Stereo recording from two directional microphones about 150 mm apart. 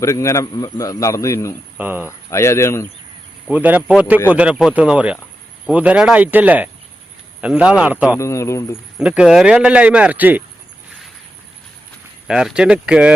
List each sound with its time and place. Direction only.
0.0 s a man's voice: 20° left (ahead or behind)
1.8 s speech: 10° right (ahead or behind)
2.0 s speech: 20° left (ahead or behind)
3.5 s speech: 10° right (ahead or behind)
8.2 s a man's voice: 20° left (ahead or behind)
9.0 s speech: 5° right (ahead or behind)
12.3 s speech: 5° right (ahead or behind)